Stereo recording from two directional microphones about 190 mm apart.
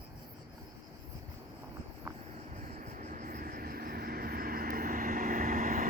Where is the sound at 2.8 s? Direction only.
40° right (ahead or behind).